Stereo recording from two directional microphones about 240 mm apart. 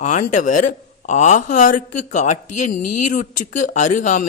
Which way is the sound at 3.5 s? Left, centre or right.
Left.